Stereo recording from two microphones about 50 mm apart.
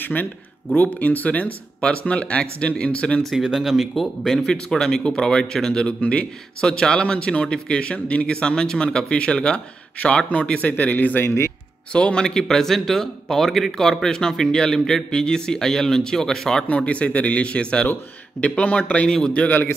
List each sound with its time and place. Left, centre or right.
0.0 s speech: left
3.4 s speech: centre
3.9 s speech: centre
4.4 s speech: centre; by 11.2 s left
11.2 s speech: left
11.9 s speech: centre
16.6 s speech: left
19.0 s speech: centre